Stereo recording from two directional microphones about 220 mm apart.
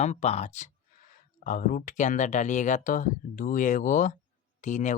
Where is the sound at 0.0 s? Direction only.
30° left (ahead or behind).